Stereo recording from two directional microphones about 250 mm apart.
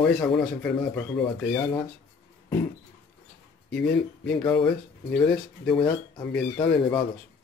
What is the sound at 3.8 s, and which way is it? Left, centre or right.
Speech, left.